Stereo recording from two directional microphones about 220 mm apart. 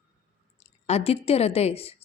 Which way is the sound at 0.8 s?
30° left (ahead or behind).